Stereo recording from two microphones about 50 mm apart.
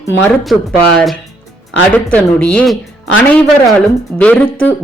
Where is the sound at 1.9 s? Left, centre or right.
Left.